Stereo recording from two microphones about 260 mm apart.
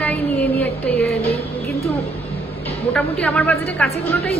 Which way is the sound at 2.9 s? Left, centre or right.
Centre.